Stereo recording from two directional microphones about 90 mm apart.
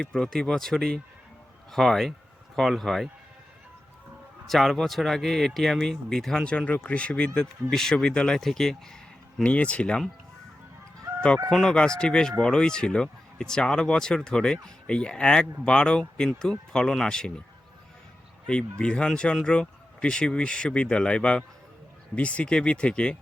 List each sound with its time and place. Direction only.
0.0 s speech: 5° left (ahead or behind)
4.4 s speech: centre (ahead or behind)
11.5 s speech: 10° left (ahead or behind)
18.4 s speech: 10° left (ahead or behind)